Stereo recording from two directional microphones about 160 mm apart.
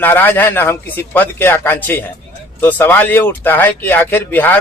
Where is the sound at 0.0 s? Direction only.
15° left (ahead or behind).